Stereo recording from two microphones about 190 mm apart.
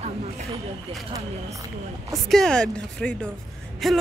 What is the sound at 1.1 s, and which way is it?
Speech, 15° right (ahead or behind).